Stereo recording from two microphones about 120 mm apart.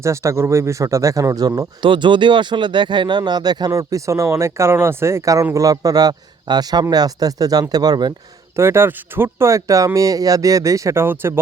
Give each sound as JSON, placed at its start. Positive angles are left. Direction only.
{"t": 0.0, "sound": "speech", "side_deg": -25}
{"t": 1.8, "sound": "speech", "side_deg": -40}
{"t": 8.5, "sound": "speech", "side_deg": -20}